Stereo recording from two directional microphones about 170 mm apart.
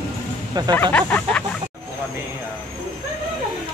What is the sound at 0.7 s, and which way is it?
Speech, 10° left (ahead or behind).